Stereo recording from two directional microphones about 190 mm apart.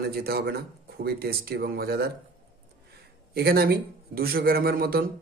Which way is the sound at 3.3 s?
55° right (ahead or behind).